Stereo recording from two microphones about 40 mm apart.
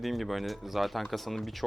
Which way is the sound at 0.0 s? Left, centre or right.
Centre.